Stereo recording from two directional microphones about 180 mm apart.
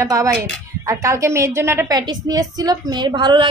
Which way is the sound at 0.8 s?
15° right (ahead or behind).